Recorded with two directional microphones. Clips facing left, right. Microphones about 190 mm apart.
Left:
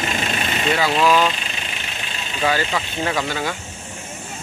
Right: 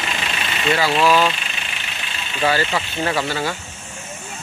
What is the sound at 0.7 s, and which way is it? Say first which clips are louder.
Speech: right 1 dB; 5° right (ahead or behind).